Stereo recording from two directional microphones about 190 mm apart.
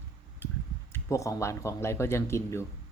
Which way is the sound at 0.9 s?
15° left (ahead or behind).